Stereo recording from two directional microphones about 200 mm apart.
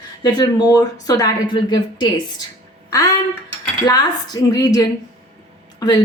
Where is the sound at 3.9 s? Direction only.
20° left (ahead or behind).